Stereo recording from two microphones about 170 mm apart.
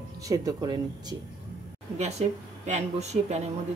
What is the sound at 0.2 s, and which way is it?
Speech, 20° right (ahead or behind).